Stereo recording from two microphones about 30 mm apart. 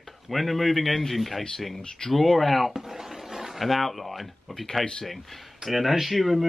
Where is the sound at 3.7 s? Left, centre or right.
Centre.